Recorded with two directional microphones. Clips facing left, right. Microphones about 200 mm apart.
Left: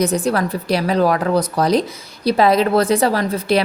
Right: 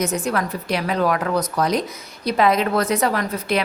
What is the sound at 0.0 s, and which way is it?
A woman's voice, 35° left (ahead or behind).